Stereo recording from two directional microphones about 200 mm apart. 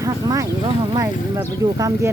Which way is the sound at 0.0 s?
15° right (ahead or behind).